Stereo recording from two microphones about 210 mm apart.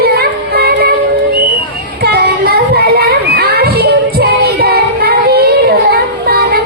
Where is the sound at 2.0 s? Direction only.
50° right (ahead or behind).